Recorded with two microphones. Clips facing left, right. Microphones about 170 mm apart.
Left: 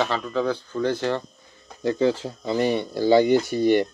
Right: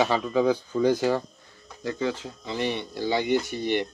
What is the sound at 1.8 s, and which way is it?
Speech, 30° left (ahead or behind).